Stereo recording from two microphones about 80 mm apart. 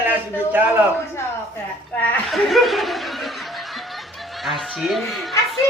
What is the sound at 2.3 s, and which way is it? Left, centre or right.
Speech, centre.